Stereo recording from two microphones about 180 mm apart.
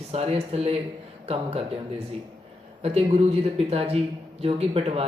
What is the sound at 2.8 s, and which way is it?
Speech, 35° right (ahead or behind).